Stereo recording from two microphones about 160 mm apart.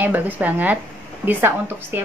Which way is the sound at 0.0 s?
10° right (ahead or behind).